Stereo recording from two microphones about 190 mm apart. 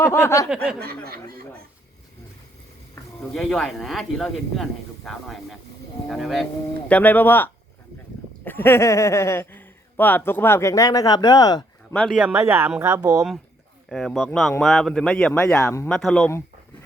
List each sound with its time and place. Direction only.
0.0 s speech: 15° left (ahead or behind)
0.5 s speech: 5° right (ahead or behind)
0.8 s speech: 55° right (ahead or behind)
3.2 s speech: centre (ahead or behind); by 11.9 s 20° left (ahead or behind)
11.9 s speech: centre (ahead or behind)
13.9 s speech: centre (ahead or behind)
15.9 s speech: centre (ahead or behind)